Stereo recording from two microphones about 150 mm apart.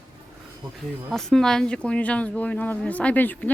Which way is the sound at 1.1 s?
5° left (ahead or behind).